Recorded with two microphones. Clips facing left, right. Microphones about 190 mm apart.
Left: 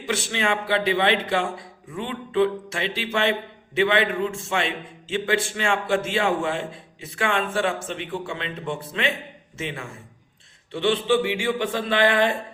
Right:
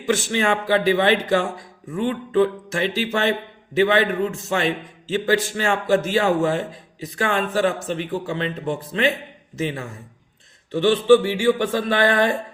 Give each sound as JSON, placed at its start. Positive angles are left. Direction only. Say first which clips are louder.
{"t": 0.0, "sound": "a man's voice", "louder": "right 5 dB", "side_deg": -45}